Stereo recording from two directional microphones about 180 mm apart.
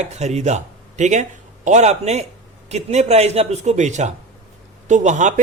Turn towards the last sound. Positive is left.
turn(degrees=-40)  # may be behind; listen again after turning